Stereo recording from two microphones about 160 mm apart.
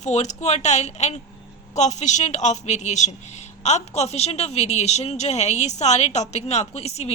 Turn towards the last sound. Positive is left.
turn(degrees=40)  # may be behind; listen again after turning